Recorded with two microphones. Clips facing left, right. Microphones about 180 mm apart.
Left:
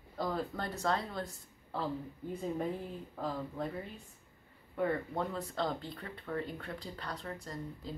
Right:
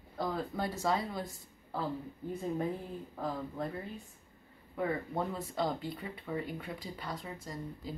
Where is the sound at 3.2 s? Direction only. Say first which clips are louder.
Even; centre (ahead or behind).